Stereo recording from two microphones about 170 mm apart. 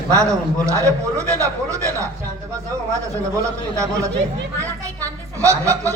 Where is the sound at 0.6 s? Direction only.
20° right (ahead or behind).